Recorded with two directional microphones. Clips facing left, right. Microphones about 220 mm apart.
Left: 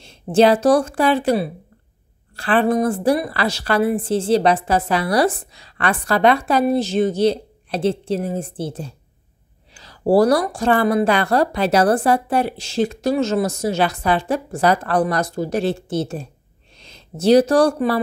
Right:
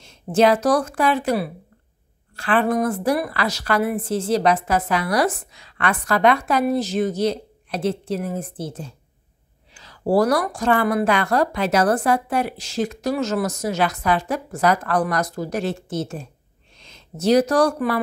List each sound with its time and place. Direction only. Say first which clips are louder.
0.0 s a woman's voice: left 3 dB; 30° left (ahead or behind)